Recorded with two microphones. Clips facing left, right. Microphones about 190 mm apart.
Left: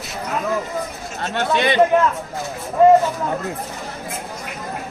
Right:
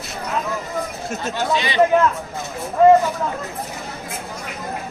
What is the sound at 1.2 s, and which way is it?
Chatter, 60° left (ahead or behind).